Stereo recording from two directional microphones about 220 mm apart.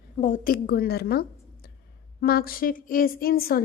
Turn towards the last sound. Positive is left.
turn(degrees=40)  # may be behind; listen again after turning